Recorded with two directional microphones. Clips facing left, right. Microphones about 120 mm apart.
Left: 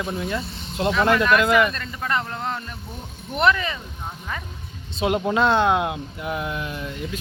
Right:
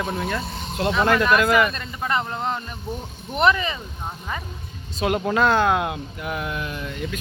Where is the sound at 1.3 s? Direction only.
5° right (ahead or behind).